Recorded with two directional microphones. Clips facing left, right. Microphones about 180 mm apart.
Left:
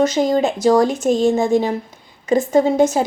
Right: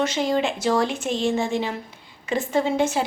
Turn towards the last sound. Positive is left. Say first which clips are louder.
# left 7 dB
turn(degrees=40)  # may be behind; listen again after turning